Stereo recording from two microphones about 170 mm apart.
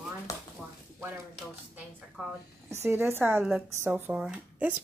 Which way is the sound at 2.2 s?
5° right (ahead or behind).